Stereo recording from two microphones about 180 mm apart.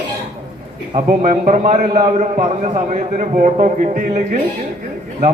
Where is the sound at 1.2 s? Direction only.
45° right (ahead or behind).